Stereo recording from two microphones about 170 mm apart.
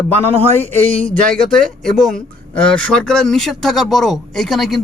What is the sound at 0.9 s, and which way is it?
Speech, 10° left (ahead or behind).